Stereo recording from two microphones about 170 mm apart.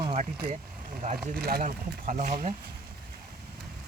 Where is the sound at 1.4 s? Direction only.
65° right (ahead or behind).